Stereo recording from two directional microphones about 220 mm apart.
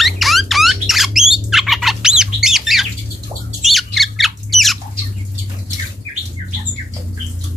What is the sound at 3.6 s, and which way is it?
Squawk, centre (ahead or behind).